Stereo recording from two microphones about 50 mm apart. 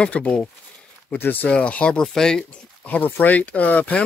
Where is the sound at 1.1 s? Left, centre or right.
Left.